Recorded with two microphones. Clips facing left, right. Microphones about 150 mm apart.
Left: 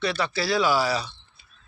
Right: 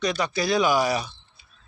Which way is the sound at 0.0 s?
15° right (ahead or behind).